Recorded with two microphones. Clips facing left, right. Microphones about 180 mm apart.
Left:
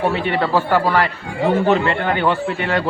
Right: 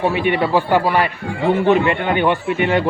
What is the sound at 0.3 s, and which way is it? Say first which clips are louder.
Speech: right 2 dB; 15° right (ahead or behind).